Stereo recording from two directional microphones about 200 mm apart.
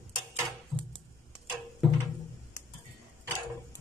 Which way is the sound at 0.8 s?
Centre (ahead or behind).